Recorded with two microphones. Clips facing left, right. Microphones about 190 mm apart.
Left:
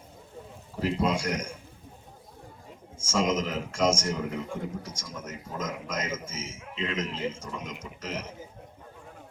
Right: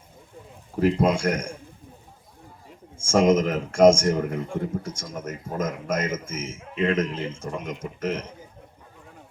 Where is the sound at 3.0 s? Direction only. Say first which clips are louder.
Right 8 dB; 55° right (ahead or behind).